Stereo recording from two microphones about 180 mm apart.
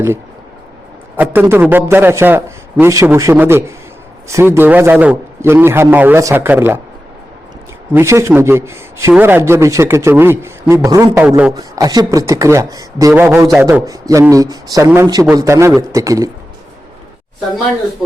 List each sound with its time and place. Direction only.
1.1 s a man's voice: 10° right (ahead or behind)
7.9 s a man's voice: 15° right (ahead or behind)
11.3 s a man's voice: 5° right (ahead or behind)
11.5 s a man's voice: 20° right (ahead or behind)